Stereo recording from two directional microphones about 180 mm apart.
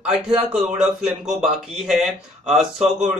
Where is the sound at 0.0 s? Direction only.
5° right (ahead or behind).